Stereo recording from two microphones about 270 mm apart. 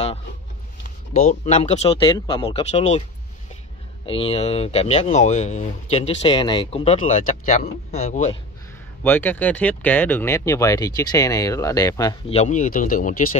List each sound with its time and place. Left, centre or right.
0.8 s speech: left
4.0 s speech: centre
9.0 s speech: centre; by 13.1 s left